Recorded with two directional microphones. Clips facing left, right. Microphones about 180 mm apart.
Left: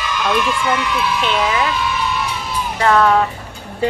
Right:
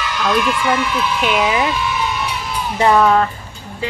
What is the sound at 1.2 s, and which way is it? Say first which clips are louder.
Speech: right 3 dB; 10° right (ahead or behind).